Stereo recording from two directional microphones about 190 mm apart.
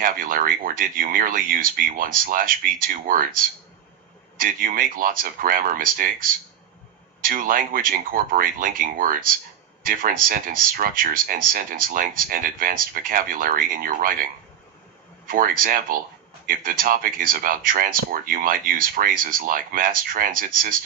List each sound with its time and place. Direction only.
0.0 s speech: 45° right (ahead or behind)
4.4 s speech: 45° right (ahead or behind)
15.3 s speech: 50° right (ahead or behind)